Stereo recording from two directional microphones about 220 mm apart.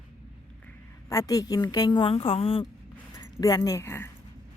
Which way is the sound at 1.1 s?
15° left (ahead or behind).